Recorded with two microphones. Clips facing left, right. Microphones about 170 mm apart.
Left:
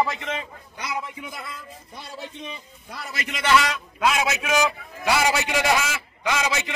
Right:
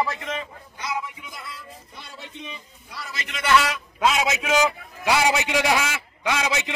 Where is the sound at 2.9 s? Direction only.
50° left (ahead or behind).